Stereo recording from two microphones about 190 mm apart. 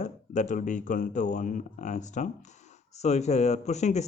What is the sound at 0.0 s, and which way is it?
Speech, 40° left (ahead or behind).